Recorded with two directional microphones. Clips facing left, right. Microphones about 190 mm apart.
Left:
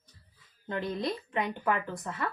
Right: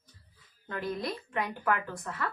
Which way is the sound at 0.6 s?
20° left (ahead or behind).